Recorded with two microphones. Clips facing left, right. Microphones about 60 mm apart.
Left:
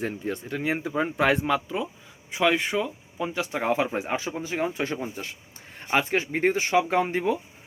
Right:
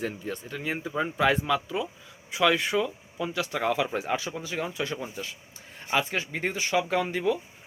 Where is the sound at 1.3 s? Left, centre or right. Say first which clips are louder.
Left 2 dB; left.